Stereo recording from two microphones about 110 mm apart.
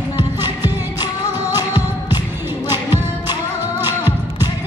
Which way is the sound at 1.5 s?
35° left (ahead or behind).